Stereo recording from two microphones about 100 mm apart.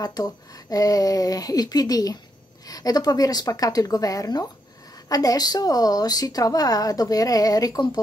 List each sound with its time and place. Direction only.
0.0 s a woman's voice: 40° left (ahead or behind)